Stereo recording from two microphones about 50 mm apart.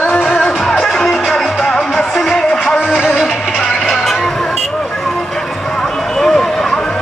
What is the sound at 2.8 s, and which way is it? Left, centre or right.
Music, centre.